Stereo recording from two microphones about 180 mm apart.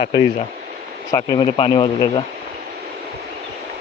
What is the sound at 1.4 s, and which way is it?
Speech, 30° left (ahead or behind).